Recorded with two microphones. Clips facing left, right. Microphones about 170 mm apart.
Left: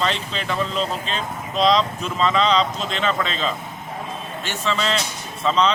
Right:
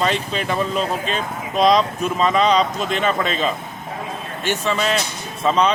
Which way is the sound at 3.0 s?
10° right (ahead or behind).